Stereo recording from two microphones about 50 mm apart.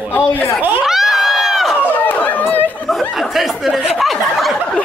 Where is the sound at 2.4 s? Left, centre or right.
Left.